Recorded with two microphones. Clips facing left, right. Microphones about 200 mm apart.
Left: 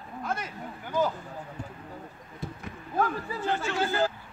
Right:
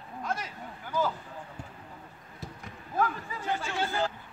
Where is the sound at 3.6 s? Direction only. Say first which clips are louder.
Left 4 dB; 5° left (ahead or behind).